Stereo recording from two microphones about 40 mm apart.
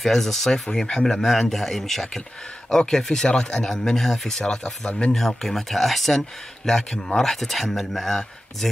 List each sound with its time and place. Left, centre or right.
0.0 s speech: centre